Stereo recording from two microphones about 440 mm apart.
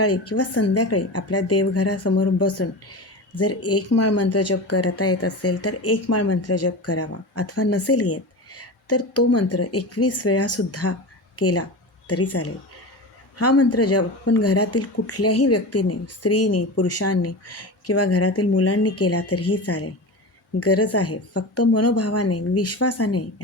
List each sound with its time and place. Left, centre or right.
0.0 s a woman's voice: left